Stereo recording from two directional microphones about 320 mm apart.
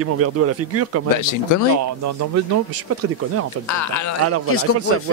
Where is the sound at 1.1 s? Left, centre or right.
Left.